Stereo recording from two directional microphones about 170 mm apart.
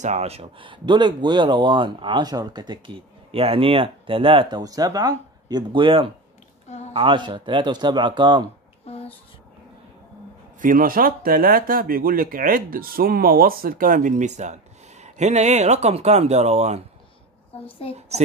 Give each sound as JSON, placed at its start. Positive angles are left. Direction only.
{"t": 0.0, "sound": "speech", "side_deg": -40}
{"t": 8.8, "sound": "a sound", "side_deg": 35}
{"t": 10.6, "sound": "speech", "side_deg": -55}
{"t": 17.8, "sound": "a child's voice", "side_deg": 35}